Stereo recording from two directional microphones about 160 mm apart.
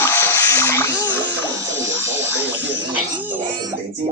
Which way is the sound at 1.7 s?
20° right (ahead or behind).